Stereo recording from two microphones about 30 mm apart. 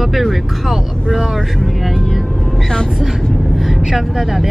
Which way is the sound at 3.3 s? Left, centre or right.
Centre.